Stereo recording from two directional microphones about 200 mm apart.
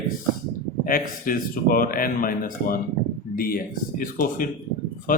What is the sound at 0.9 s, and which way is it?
Speech, 45° left (ahead or behind).